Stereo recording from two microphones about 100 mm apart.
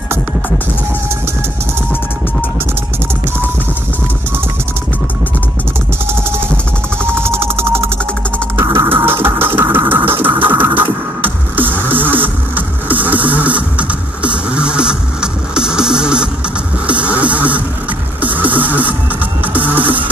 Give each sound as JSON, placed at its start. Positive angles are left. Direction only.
{"t": 7.1, "sound": "music", "side_deg": -25}
{"t": 16.0, "sound": "vehicle", "side_deg": -10}
{"t": 17.0, "sound": "a sound", "side_deg": -15}
{"t": 19.4, "sound": "music", "side_deg": -15}